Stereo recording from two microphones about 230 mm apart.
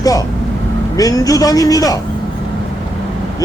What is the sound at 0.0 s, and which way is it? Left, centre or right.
A man's voice, centre.